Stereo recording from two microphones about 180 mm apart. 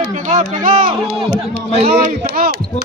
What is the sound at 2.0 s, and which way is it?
Speech, 55° right (ahead or behind).